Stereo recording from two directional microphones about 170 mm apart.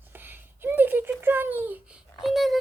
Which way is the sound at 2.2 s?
Centre (ahead or behind).